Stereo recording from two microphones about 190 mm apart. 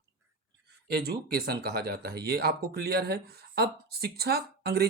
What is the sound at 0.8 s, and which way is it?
Speech, 55° right (ahead or behind).